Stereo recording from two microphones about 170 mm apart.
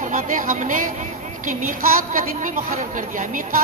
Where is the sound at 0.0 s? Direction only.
50° right (ahead or behind).